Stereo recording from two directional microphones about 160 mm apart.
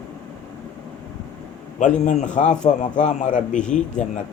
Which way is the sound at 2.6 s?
35° left (ahead or behind).